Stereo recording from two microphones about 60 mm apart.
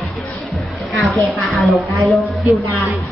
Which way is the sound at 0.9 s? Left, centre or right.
Centre.